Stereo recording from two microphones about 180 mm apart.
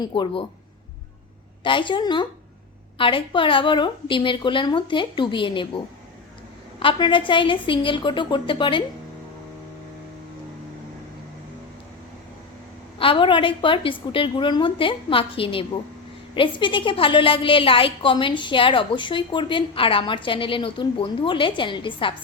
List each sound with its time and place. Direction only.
0.0 s a woman's voice: 25° left (ahead or behind)
1.6 s a woman's voice: 25° left (ahead or behind)
13.0 s a woman's voice: 30° left (ahead or behind)